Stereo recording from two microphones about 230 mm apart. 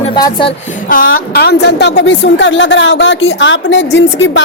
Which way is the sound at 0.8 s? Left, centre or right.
Left.